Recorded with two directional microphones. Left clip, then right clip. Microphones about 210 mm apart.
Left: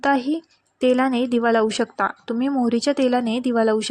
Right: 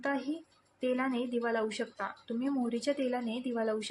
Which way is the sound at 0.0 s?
40° left (ahead or behind).